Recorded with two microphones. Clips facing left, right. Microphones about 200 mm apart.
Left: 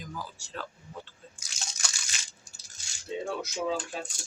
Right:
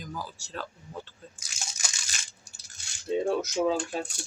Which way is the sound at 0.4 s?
40° right (ahead or behind).